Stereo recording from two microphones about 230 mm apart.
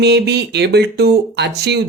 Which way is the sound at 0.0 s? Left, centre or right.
Right.